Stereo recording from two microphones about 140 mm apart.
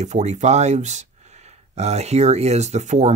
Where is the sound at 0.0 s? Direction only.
55° right (ahead or behind).